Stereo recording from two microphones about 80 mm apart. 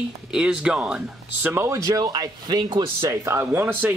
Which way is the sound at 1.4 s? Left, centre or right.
Right.